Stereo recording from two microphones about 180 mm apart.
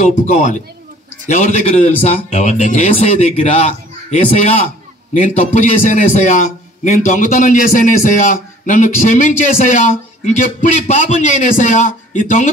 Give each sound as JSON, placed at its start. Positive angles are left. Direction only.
{"t": 0.3, "sound": "a man's voice", "side_deg": 45}